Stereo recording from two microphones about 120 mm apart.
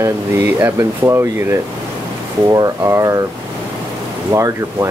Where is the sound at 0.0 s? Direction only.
20° right (ahead or behind).